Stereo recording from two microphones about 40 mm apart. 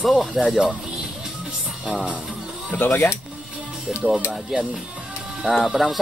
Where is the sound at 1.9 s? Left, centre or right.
Right.